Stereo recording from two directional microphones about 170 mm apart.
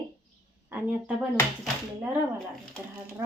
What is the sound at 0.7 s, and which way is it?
Speech, 5° right (ahead or behind).